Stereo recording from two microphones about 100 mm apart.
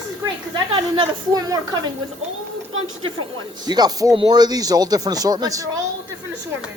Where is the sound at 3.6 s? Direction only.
45° right (ahead or behind).